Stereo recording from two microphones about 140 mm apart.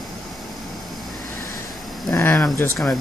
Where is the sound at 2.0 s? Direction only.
25° left (ahead or behind).